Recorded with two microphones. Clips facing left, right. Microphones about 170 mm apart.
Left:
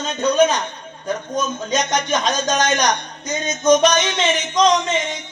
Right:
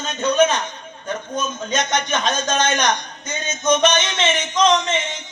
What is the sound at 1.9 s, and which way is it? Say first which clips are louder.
Speech: left 1 dB; 35° left (ahead or behind).